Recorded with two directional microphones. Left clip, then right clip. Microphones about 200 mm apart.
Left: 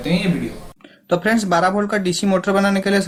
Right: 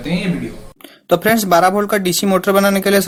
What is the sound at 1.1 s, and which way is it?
Speech, 45° right (ahead or behind).